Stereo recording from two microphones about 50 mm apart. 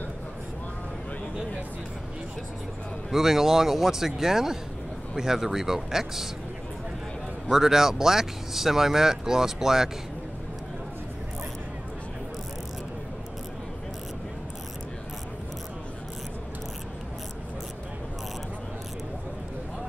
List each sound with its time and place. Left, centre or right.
3.1 s speech: centre
7.5 s speech: centre